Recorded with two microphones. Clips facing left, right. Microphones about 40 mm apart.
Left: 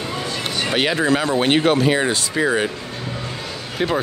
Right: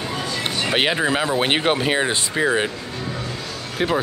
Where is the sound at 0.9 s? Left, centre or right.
Centre.